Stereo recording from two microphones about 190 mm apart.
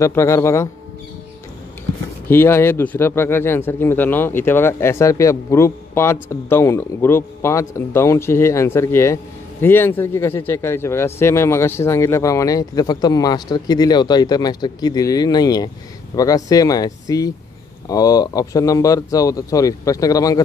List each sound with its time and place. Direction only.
0.0 s a man's voice: 15° left (ahead or behind)
2.2 s a man's voice: 10° left (ahead or behind)